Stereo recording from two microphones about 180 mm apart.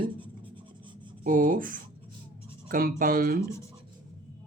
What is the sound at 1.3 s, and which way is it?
Speech, 50° right (ahead or behind).